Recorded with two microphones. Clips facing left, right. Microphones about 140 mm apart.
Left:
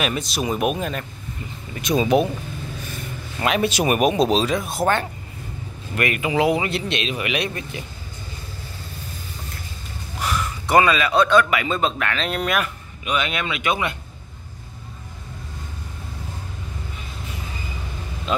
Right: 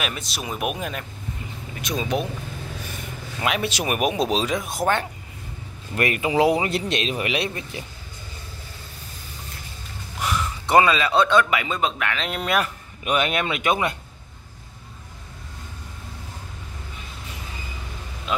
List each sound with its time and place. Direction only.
0.0 s speech: centre (ahead or behind)
3.3 s speech: 5° right (ahead or behind)
5.9 s speech: 30° right (ahead or behind)
10.2 s a man's voice: 20° right (ahead or behind)
13.0 s speech: 50° right (ahead or behind)